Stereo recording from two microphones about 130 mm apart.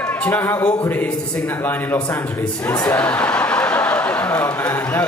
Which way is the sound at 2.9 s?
10° left (ahead or behind).